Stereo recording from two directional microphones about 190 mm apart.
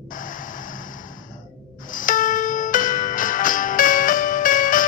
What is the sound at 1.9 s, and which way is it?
Music, 45° left (ahead or behind).